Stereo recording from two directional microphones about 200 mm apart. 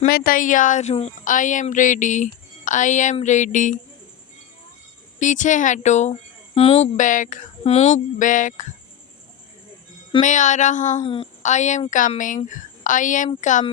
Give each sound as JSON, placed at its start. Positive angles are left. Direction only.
{"t": 0.0, "sound": "a woman's voice", "side_deg": 45}
{"t": 5.2, "sound": "a woman's voice", "side_deg": 40}
{"t": 10.2, "sound": "a woman's voice", "side_deg": 40}
{"t": 11.0, "sound": "a woman's voice", "side_deg": 25}